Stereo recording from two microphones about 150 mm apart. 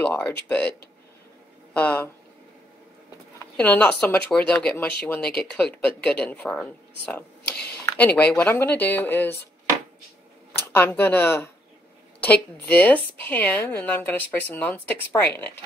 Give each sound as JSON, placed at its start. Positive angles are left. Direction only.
{"t": 0.0, "sound": "speech", "side_deg": 15}
{"t": 3.5, "sound": "speech", "side_deg": 10}
{"t": 10.5, "sound": "speech", "side_deg": 15}